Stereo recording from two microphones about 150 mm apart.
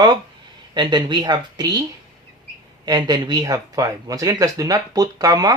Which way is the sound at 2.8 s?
25° right (ahead or behind).